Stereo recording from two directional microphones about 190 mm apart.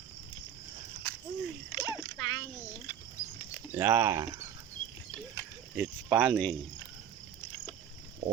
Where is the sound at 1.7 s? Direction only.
20° left (ahead or behind).